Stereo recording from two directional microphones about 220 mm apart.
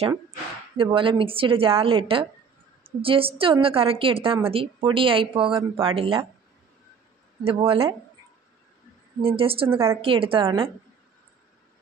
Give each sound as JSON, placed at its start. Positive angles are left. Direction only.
{"t": 0.7, "sound": "a woman's voice", "side_deg": -25}
{"t": 7.4, "sound": "a woman's voice", "side_deg": -25}
{"t": 9.2, "sound": "a woman's voice", "side_deg": -25}